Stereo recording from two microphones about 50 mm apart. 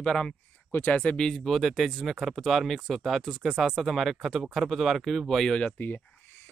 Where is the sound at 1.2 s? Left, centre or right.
Centre.